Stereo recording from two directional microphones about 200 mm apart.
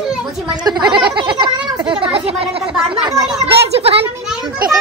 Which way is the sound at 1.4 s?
20° right (ahead or behind).